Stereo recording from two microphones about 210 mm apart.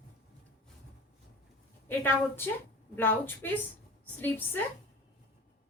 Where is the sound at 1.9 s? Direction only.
10° left (ahead or behind).